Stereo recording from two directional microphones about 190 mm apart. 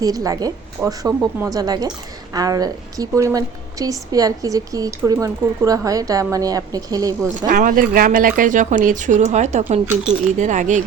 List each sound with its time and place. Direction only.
0.0 s a woman's voice: 20° right (ahead or behind)
7.4 s speech: 45° right (ahead or behind)